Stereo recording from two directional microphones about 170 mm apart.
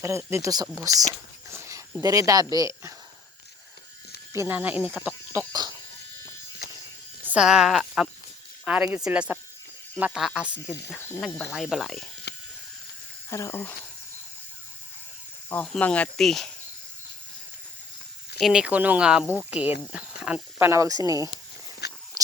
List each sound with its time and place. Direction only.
0.0 s speech: 15° right (ahead or behind)
1.5 s a sound: 15° right (ahead or behind)
2.0 s speech: 20° right (ahead or behind)
4.4 s speech: 10° right (ahead or behind)
7.3 s speech: 5° right (ahead or behind)
12.3 s a sound: 70° left (ahead or behind)
13.3 s speech: 15° left (ahead or behind)
15.4 s speech: 10° left (ahead or behind)
18.3 s speech: 5° right (ahead or behind); by 21.2 s 20° right (ahead or behind)
21.8 s a sound: 75° left (ahead or behind)